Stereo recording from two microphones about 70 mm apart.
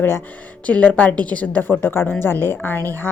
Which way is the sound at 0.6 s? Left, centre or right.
Centre.